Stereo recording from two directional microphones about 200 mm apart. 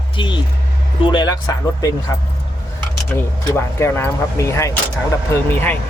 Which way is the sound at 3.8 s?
10° left (ahead or behind).